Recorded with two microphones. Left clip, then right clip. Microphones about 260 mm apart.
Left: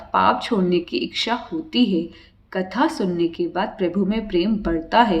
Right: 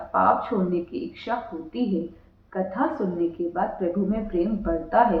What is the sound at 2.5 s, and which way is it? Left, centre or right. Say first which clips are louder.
Speech: left 4 dB; left.